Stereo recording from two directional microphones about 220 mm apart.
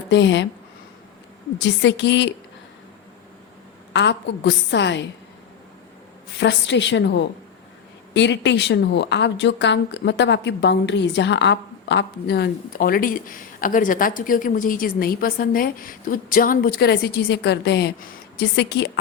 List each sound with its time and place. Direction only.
0.1 s speech: 55° left (ahead or behind)
1.5 s speech: 55° left (ahead or behind)
3.9 s speech: 50° left (ahead or behind)
6.4 s speech: 55° left (ahead or behind)